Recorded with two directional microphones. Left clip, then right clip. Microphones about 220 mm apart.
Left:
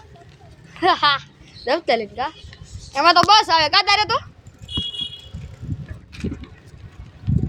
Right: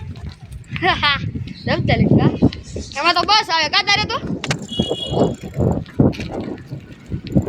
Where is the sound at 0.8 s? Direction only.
10° left (ahead or behind).